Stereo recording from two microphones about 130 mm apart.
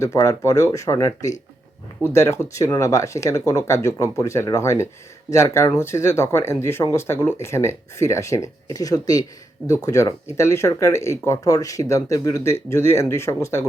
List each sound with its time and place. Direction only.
0.0 s speech: 20° left (ahead or behind)